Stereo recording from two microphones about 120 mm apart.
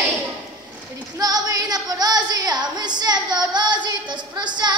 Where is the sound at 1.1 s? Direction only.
30° right (ahead or behind).